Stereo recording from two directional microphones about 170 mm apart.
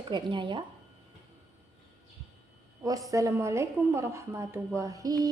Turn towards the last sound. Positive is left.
turn(degrees=-20)  # may be behind; listen again after turning